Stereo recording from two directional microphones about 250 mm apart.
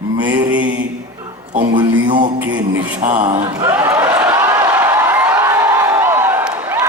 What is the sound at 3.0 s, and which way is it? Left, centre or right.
Speech, right.